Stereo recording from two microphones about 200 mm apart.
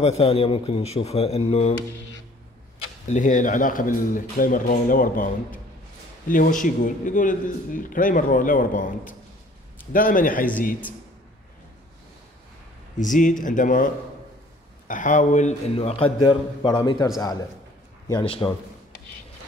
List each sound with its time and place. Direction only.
0.0 s a man's voice: 30° left (ahead or behind)
3.1 s a man's voice: 40° left (ahead or behind)
12.9 s a man's voice: 40° left (ahead or behind)
14.9 s a man's voice: 40° left (ahead or behind)